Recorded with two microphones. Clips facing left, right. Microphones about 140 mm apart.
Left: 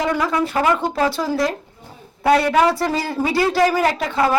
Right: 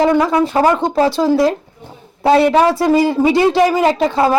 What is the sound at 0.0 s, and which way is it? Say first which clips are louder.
A man's voice: right 7 dB; 30° right (ahead or behind).